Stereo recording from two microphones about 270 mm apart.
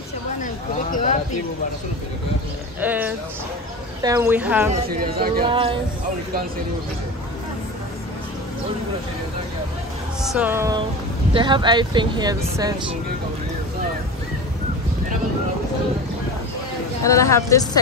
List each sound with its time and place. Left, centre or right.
0.9 s a man's voice: left
2.8 s speech: centre
4.8 s speech: right
5.5 s speech: centre
10.2 s speech: centre
17.0 s speech: centre